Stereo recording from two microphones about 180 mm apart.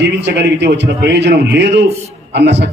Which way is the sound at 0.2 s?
70° right (ahead or behind).